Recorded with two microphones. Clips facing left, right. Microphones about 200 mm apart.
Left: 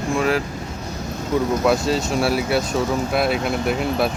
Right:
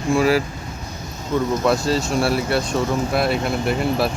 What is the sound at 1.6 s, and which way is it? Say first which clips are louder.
Speech: even; centre (ahead or behind).